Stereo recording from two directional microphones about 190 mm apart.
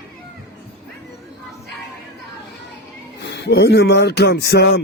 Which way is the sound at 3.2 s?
65° left (ahead or behind).